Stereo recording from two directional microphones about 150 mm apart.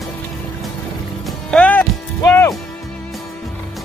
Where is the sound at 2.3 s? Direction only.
20° left (ahead or behind).